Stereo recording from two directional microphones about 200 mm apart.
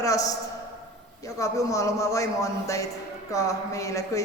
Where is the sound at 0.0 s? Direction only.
15° left (ahead or behind).